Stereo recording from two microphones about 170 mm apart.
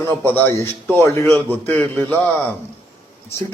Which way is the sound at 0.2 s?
10° left (ahead or behind).